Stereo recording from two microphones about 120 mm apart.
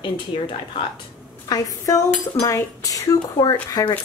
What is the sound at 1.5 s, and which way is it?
A woman's voice, 30° left (ahead or behind).